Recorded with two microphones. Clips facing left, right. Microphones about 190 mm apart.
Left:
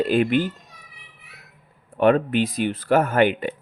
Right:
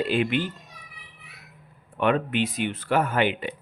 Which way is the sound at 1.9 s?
40° left (ahead or behind).